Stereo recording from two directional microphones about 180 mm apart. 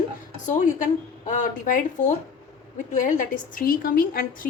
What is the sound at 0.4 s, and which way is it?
A woman's voice, 45° left (ahead or behind).